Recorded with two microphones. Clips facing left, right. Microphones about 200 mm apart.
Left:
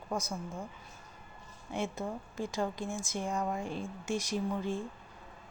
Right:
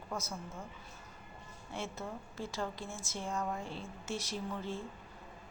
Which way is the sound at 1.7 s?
15° left (ahead or behind).